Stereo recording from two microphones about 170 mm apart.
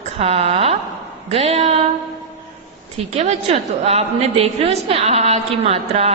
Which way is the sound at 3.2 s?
40° right (ahead or behind).